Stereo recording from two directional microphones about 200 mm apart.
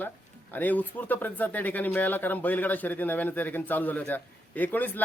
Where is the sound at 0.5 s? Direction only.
10° left (ahead or behind).